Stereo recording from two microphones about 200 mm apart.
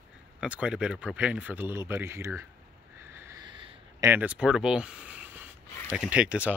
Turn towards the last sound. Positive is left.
turn(degrees=-5)  # may be behind; listen again after turning